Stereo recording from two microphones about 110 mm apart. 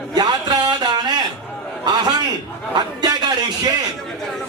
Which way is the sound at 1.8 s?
40° right (ahead or behind).